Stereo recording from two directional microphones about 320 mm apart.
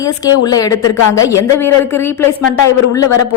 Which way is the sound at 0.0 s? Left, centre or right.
Centre.